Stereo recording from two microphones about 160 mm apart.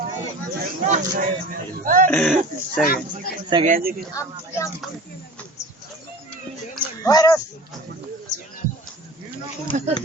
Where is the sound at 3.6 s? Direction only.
60° right (ahead or behind).